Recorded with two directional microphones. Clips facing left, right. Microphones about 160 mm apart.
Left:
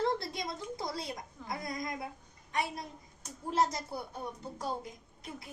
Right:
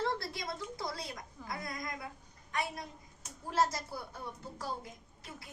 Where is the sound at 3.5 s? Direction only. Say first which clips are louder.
Left 1 dB; 20° left (ahead or behind).